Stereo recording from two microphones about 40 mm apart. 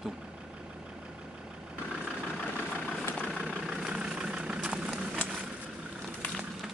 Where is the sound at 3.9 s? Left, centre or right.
Right.